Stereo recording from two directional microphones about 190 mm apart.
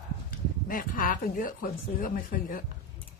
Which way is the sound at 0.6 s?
50° left (ahead or behind).